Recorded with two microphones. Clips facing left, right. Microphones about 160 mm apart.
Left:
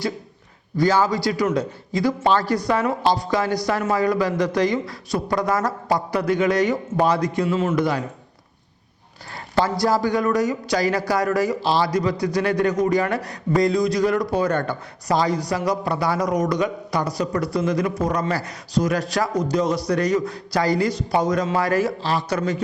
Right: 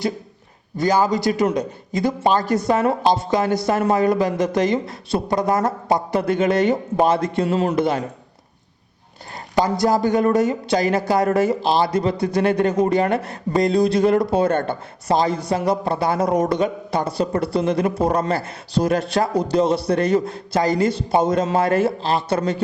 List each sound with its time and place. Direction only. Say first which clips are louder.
0.8 s speech: right 1 dB; 20° right (ahead or behind)
7.4 s a man's voice: right 2 dB; 35° right (ahead or behind)
7.8 s speech: right 2 dB; 25° right (ahead or behind)
9.6 s speech: right 2 dB; 20° right (ahead or behind)